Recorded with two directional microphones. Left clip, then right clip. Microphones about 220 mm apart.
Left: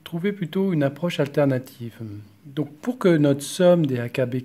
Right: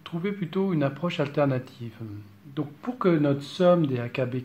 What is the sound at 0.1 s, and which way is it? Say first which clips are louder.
Speech: left 4 dB; 40° left (ahead or behind).